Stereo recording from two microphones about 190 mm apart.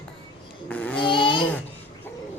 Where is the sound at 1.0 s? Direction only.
25° left (ahead or behind).